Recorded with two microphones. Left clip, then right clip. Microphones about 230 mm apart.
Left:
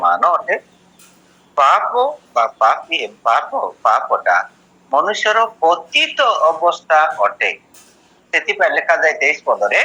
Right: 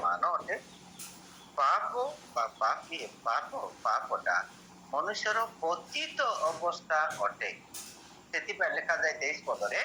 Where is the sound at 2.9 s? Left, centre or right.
Left.